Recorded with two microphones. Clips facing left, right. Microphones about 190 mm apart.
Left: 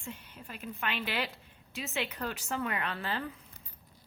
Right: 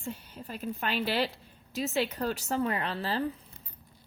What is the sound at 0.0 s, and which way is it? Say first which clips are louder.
A woman's voice: right 5 dB; 35° right (ahead or behind).